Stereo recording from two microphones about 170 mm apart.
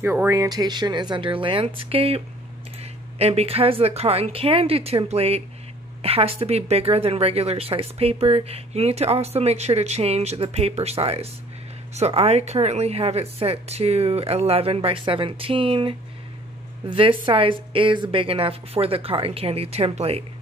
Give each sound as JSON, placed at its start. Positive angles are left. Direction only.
{"t": 0.0, "sound": "speech", "side_deg": -15}